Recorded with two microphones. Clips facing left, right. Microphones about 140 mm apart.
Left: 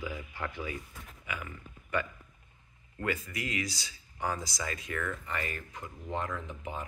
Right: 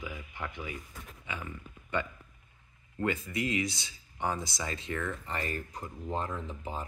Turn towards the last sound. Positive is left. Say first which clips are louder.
# right 1 dB
turn(degrees=-30)  # may be behind; listen again after turning